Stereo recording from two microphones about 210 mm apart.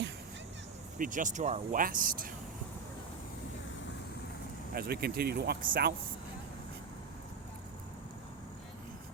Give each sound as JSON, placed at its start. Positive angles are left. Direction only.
{"t": 0.9, "sound": "speech", "side_deg": -40}
{"t": 4.7, "sound": "speech", "side_deg": -45}